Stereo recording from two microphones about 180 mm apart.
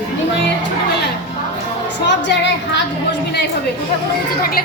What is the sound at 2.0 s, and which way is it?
Music, 80° left.